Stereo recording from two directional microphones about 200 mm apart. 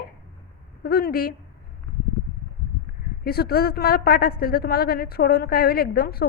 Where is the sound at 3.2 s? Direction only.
50° left (ahead or behind).